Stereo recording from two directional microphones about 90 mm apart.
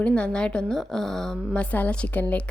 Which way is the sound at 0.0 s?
10° left (ahead or behind).